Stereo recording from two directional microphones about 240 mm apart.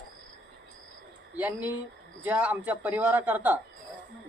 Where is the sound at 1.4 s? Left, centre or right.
Centre.